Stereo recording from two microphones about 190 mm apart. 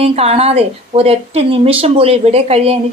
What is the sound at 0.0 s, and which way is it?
Speech, 30° right (ahead or behind).